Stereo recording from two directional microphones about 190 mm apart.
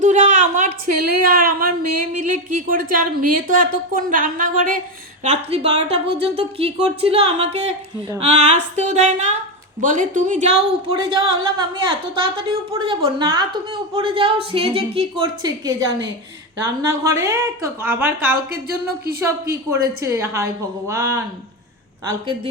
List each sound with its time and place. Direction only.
0.0 s a woman's voice: 40° right (ahead or behind)
5.2 s a woman's voice: 35° right (ahead or behind); by 18.3 s 10° right (ahead or behind)
20.0 s a woman's voice: 15° right (ahead or behind)